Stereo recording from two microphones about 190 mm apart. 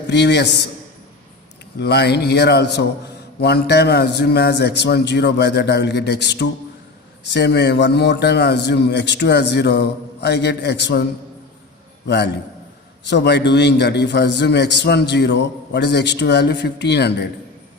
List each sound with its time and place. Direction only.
0.1 s a man's voice: 65° left (ahead or behind)
1.8 s a man's voice: 60° left (ahead or behind)
12.0 s a man's voice: 60° left (ahead or behind)